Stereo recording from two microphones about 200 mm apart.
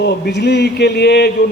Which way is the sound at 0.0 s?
55° left (ahead or behind).